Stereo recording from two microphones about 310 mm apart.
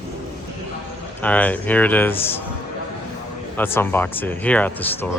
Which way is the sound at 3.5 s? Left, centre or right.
Centre.